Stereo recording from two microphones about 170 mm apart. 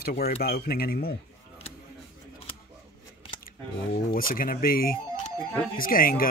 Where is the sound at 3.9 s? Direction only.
55° left (ahead or behind).